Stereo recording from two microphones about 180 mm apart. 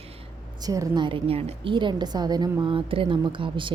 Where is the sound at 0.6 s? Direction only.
20° right (ahead or behind).